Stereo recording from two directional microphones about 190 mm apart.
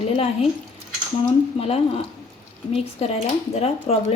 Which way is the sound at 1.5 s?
30° left (ahead or behind).